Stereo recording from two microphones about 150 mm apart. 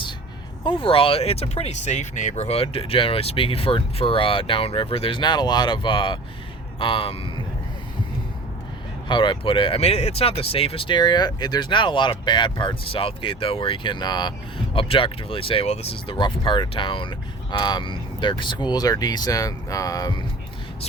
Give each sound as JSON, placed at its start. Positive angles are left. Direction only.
{"t": 0.6, "sound": "speech", "side_deg": 35}
{"t": 9.0, "sound": "speech", "side_deg": 35}